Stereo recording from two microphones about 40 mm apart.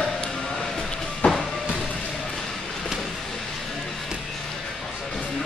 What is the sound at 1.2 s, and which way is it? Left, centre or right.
Music, left.